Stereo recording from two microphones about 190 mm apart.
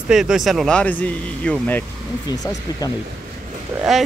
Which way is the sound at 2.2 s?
20° left (ahead or behind).